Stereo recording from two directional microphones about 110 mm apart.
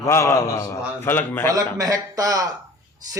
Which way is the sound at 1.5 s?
30° right (ahead or behind).